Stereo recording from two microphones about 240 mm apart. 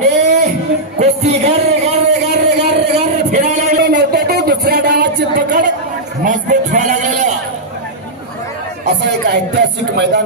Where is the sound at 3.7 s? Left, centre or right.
Right.